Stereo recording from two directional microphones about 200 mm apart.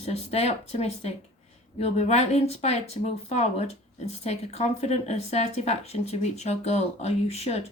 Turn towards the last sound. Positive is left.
turn(degrees=30)  # may be behind; listen again after turning